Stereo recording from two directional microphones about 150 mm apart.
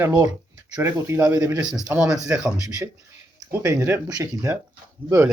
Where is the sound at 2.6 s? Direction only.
20° right (ahead or behind).